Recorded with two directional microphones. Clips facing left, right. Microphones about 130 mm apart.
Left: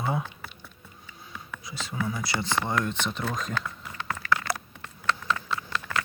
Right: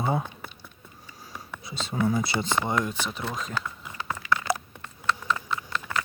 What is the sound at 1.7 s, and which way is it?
Speech, 25° right (ahead or behind).